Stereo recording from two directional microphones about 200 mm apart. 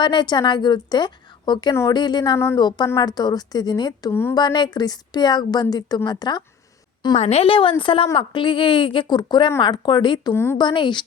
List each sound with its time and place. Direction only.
0.0 s a woman's voice: 20° left (ahead or behind)
7.2 s a woman's voice: 30° left (ahead or behind)
10.3 s speech: 10° left (ahead or behind)
10.7 s a woman's voice: 25° left (ahead or behind)